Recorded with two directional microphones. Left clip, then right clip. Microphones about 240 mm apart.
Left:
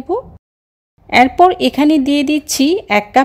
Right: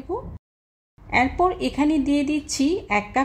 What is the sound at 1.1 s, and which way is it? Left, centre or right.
Speech, left.